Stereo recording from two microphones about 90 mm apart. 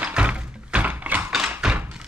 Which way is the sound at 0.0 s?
15° right (ahead or behind).